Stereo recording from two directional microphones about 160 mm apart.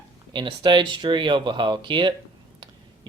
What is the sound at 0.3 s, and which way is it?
Speech, 30° right (ahead or behind).